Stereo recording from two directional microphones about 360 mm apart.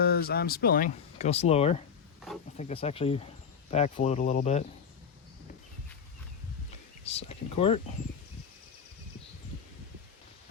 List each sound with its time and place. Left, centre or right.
0.0 s speech: left
7.0 s speech: centre